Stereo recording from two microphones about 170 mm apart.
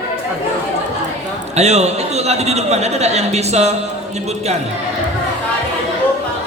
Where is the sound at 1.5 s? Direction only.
40° right (ahead or behind).